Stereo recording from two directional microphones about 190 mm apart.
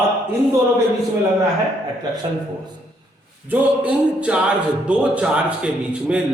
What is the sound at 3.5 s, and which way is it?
A man's voice, 10° right (ahead or behind).